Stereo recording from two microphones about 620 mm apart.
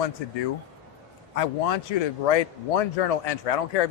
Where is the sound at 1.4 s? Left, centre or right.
Left.